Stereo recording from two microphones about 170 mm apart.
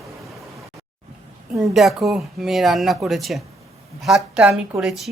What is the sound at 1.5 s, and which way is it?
Speech, centre (ahead or behind).